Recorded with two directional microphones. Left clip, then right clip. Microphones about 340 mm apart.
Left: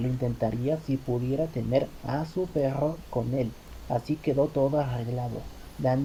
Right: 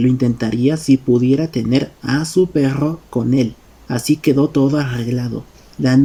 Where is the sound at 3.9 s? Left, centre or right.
Right.